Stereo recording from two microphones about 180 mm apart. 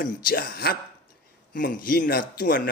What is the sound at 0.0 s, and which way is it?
Speech, 50° left (ahead or behind).